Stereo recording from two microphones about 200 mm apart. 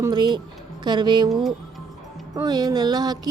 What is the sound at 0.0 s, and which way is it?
Speech, 20° right (ahead or behind).